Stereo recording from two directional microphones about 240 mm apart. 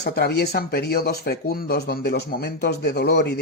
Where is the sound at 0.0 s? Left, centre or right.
Left.